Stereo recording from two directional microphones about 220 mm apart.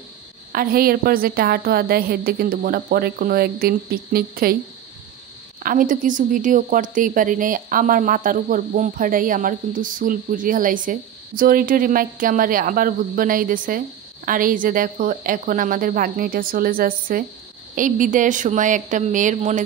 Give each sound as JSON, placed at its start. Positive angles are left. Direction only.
{"t": 0.5, "sound": "a woman's voice", "side_deg": -40}
{"t": 5.6, "sound": "a woman's voice", "side_deg": -40}